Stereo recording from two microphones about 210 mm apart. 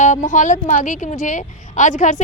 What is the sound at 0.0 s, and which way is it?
A woman's voice, 35° left (ahead or behind).